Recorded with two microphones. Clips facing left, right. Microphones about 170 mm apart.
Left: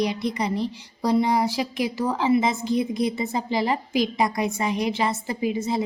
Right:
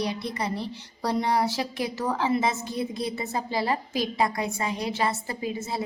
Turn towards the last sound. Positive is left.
turn(degrees=15)  # may be behind; listen again after turning